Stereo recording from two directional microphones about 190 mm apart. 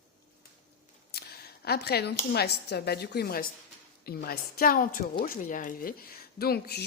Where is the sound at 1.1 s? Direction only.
55° left (ahead or behind).